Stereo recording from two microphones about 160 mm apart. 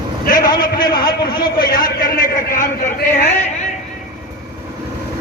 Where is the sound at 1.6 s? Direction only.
65° left (ahead or behind).